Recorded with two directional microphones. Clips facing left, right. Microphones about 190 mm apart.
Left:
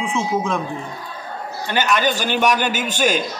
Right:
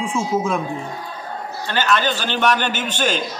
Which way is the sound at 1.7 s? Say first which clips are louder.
Left 1 dB; 15° left (ahead or behind).